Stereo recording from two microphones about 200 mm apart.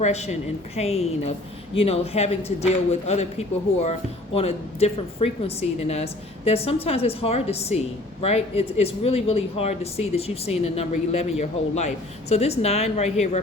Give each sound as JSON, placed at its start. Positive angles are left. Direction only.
{"t": 0.0, "sound": "speech", "side_deg": 35}